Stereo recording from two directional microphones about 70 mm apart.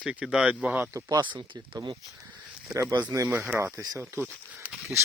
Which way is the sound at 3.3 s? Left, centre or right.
Right.